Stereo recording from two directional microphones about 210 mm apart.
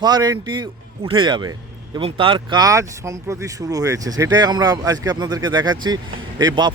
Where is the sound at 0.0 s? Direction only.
20° right (ahead or behind).